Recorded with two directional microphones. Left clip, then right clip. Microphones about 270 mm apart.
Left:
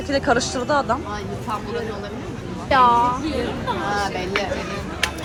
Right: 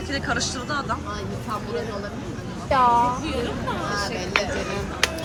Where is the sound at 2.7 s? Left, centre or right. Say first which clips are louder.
Left 3 dB; left.